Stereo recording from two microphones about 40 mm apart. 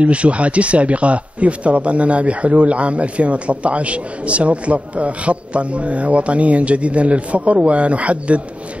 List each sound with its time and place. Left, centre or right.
0.0 s a man's voice: right